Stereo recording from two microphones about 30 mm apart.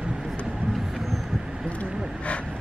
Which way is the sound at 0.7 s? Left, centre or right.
Centre.